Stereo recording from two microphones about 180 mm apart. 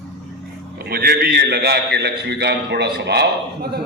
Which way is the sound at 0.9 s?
55° right (ahead or behind).